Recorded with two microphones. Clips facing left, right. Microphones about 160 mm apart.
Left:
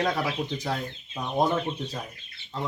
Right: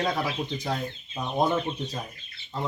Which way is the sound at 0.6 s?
15° right (ahead or behind).